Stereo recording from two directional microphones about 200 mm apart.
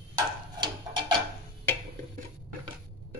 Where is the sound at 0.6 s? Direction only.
20° right (ahead or behind).